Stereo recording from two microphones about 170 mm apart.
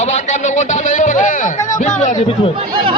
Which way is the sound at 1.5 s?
20° left (ahead or behind).